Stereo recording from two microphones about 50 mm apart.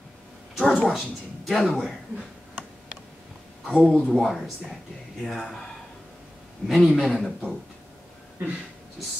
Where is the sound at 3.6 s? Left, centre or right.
Centre.